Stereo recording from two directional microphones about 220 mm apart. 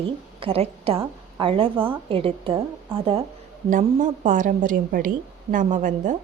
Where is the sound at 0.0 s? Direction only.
25° right (ahead or behind).